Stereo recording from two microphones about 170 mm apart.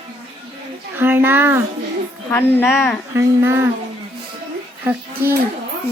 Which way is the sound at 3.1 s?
15° right (ahead or behind).